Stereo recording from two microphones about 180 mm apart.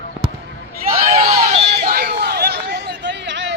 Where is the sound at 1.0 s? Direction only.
35° right (ahead or behind).